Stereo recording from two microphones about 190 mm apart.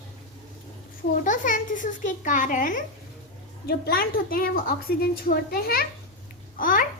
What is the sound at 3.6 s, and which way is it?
A child's voice, 55° left (ahead or behind).